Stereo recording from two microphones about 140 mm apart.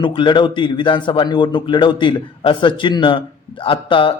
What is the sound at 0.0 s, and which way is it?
A man's voice, 35° left (ahead or behind).